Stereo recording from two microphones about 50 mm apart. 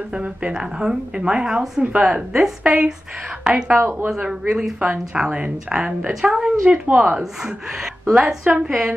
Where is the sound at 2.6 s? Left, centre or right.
Right.